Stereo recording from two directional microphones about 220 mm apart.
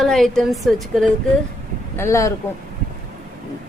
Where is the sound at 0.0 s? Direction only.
Centre (ahead or behind).